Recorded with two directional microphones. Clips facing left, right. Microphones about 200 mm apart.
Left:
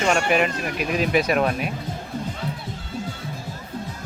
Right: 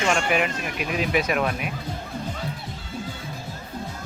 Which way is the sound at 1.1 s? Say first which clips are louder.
Left 3 dB; 35° left (ahead or behind).